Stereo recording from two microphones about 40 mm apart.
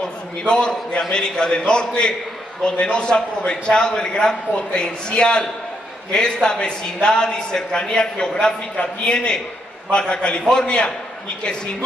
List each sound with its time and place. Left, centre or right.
0.4 s a man's voice: left